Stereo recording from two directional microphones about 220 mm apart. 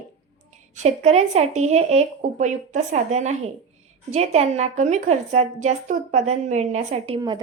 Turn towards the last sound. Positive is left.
turn(degrees=-25)  # may be behind; listen again after turning